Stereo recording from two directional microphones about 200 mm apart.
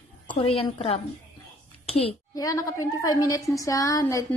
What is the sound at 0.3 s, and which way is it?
A woman's voice, 25° left (ahead or behind).